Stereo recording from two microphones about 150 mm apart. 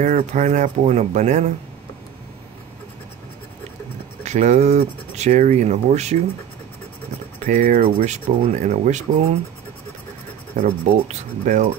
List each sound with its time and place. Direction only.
0.0 s speech: 50° right (ahead or behind)
4.2 s speech: 50° right (ahead or behind)
7.4 s speech: 55° right (ahead or behind)
10.6 s speech: 50° right (ahead or behind)